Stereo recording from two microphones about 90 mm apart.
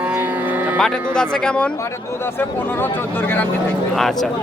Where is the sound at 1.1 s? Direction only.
10° left (ahead or behind).